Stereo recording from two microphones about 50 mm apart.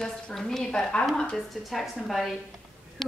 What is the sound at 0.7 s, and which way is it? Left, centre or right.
Speech, centre.